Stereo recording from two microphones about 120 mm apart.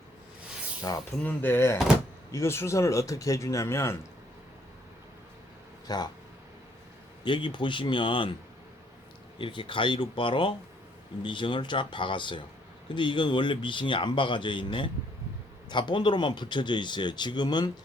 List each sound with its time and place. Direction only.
0.8 s speech: 30° left (ahead or behind)
1.2 s speech: 15° left (ahead or behind)
5.9 s speech: 30° left (ahead or behind)
7.3 s speech: 45° left (ahead or behind)
9.4 s speech: 45° left (ahead or behind)